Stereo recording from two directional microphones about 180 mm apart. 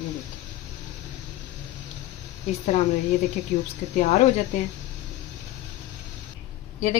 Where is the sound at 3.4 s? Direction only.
35° left (ahead or behind).